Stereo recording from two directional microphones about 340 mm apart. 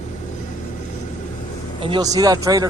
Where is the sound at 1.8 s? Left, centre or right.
Centre.